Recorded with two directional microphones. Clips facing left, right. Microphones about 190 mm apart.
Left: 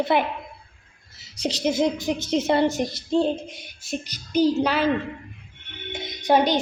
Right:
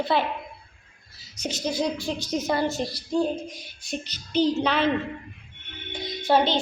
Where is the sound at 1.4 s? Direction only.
25° left (ahead or behind).